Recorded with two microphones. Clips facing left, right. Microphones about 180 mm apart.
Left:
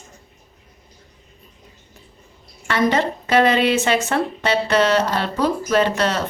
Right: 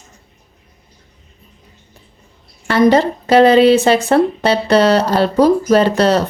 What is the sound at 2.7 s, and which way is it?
A woman's voice, 35° right (ahead or behind).